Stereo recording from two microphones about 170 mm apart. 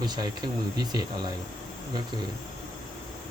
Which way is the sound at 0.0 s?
25° right (ahead or behind).